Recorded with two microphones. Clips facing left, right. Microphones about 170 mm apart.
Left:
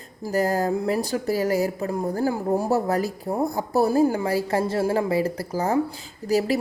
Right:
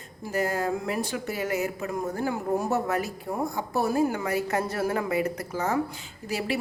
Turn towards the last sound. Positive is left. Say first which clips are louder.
# left 7 dB
turn(degrees=40)  # may be behind; listen again after turning